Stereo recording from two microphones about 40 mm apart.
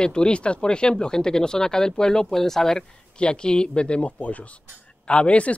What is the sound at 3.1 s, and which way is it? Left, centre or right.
Speech, left.